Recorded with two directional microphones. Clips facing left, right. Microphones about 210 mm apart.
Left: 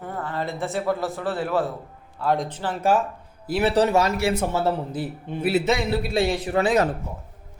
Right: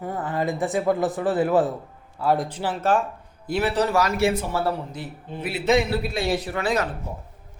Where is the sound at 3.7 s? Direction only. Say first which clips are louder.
Left 4 dB; 30° left (ahead or behind).